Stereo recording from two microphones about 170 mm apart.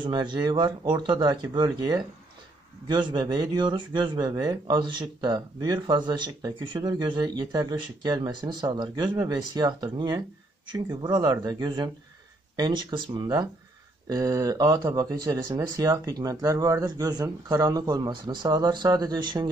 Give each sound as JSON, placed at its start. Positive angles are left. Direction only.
{"t": 0.0, "sound": "speech", "side_deg": -25}